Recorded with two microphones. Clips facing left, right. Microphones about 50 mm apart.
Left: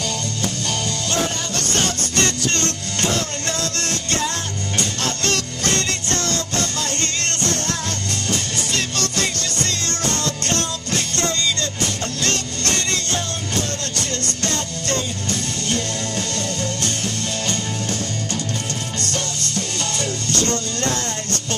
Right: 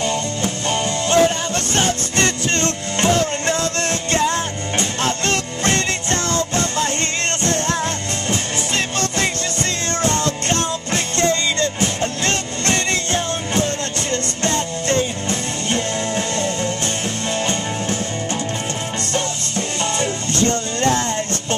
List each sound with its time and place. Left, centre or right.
0.0 s music: right
8.3 s music: right